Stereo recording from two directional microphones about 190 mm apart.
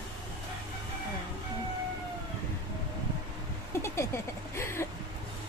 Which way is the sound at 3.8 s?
15° left (ahead or behind).